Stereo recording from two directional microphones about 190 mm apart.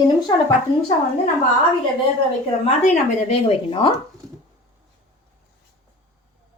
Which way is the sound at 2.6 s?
35° left (ahead or behind).